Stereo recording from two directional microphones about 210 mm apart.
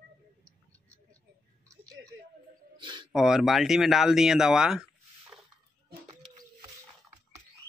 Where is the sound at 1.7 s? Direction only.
15° right (ahead or behind).